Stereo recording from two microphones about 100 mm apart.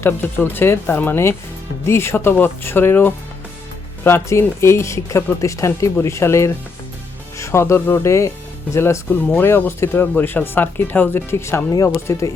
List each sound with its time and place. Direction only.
0.0 s speech: 20° left (ahead or behind)